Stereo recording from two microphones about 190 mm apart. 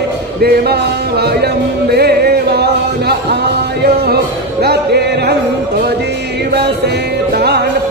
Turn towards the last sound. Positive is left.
turn(degrees=-60)  # may be behind; listen again after turning